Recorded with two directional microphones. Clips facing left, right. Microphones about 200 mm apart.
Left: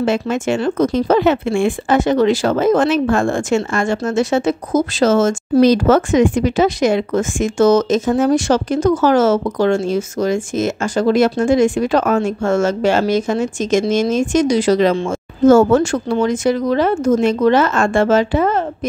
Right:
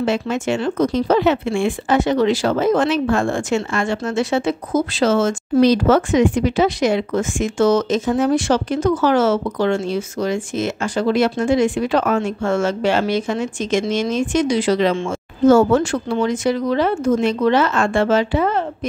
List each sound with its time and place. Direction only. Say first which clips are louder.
0.0 s speech: left 2 dB; 50° left (ahead or behind)